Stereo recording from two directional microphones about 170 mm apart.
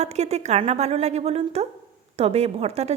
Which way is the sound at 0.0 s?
40° right (ahead or behind).